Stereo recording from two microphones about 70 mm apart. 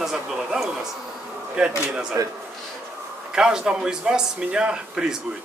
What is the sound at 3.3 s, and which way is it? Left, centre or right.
A man's voice, centre.